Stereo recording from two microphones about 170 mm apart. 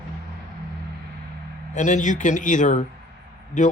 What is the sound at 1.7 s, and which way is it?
Speech, 45° left (ahead or behind).